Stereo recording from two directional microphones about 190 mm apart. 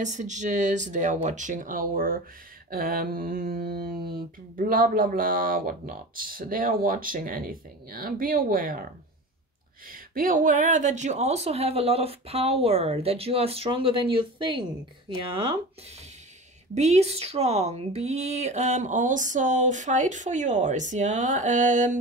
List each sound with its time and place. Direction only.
0.0 s speech: 40° right (ahead or behind)
2.7 s a sound: 50° right (ahead or behind)
9.8 s speech: 45° right (ahead or behind); by 14.7 s 25° right (ahead or behind)
16.7 s speech: 35° right (ahead or behind)